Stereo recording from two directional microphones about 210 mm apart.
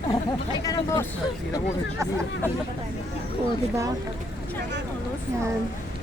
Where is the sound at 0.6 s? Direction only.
15° left (ahead or behind).